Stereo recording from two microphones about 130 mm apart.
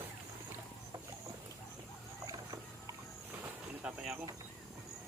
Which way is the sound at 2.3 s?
25° right (ahead or behind).